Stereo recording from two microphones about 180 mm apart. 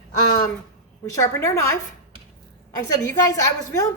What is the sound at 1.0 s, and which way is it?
Speech, 15° left (ahead or behind).